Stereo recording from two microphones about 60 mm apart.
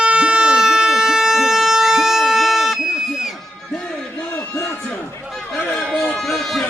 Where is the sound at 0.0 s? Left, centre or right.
Centre.